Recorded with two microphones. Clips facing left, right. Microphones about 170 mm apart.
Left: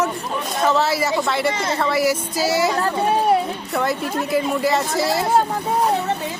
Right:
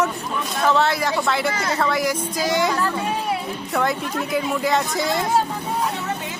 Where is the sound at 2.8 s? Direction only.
40° left (ahead or behind).